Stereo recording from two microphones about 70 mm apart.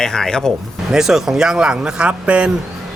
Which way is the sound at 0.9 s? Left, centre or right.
Centre.